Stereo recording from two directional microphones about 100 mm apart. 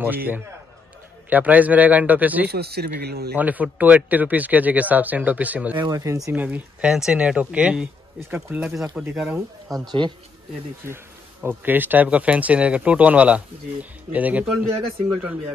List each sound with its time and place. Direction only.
0.0 s a man's voice: 20° right (ahead or behind)
5.9 s speech: 35° right (ahead or behind)
6.3 s speech: 15° right (ahead or behind)
9.8 s speech: 50° right (ahead or behind)
11.4 s speech: 20° right (ahead or behind)